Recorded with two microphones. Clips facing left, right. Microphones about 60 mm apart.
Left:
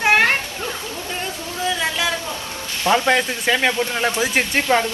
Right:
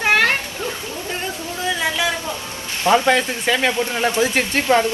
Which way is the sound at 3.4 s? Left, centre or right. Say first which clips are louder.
Even; centre.